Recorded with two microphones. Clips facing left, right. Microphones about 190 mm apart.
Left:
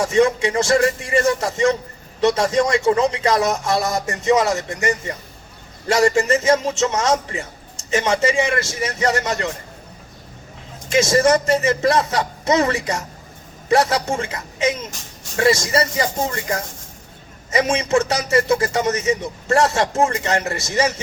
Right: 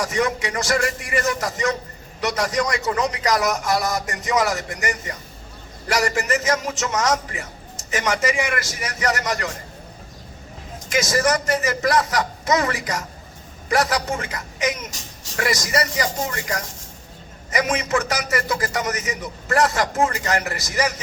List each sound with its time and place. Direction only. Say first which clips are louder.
0.0 s a man's voice: left 6 dB; 25° left (ahead or behind)
10.8 s a man's voice: left 5 dB; 25° left (ahead or behind)